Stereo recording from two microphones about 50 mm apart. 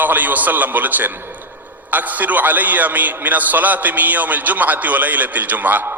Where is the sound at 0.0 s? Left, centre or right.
Right.